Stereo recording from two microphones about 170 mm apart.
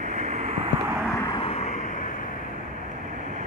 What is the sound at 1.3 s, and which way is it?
Vehicle, 35° left (ahead or behind).